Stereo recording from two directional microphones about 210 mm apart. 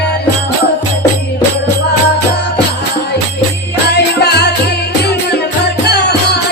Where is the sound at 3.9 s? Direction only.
50° left (ahead or behind).